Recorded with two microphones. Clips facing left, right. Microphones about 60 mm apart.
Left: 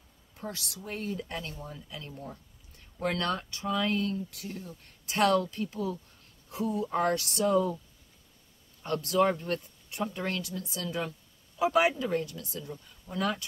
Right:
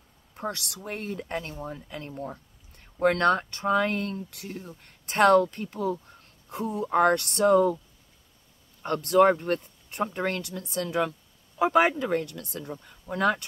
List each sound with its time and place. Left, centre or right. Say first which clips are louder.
0.5 s speech: right 5 dB; right
4.5 s speech: right 2 dB; right
8.8 s speech: right 6 dB; right
10.4 s speech: right 5 dB; right
11.5 s speech: right 4 dB; right